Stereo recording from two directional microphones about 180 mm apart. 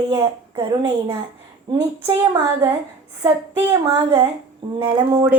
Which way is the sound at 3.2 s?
15° right (ahead or behind).